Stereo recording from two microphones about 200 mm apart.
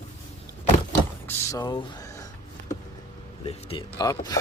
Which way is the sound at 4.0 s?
20° left (ahead or behind).